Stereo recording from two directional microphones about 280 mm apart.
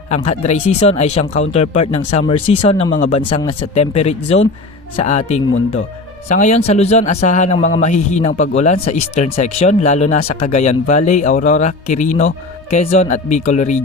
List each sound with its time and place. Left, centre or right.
0.1 s a man's voice: left